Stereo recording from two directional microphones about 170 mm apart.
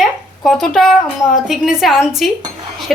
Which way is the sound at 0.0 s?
Centre (ahead or behind).